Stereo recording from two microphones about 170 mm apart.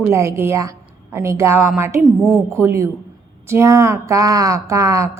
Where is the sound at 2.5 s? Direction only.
15° right (ahead or behind).